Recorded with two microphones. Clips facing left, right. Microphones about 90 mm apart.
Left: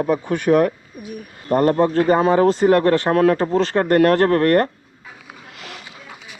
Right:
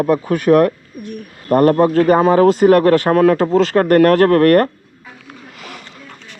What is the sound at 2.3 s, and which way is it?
Speech, 75° right (ahead or behind).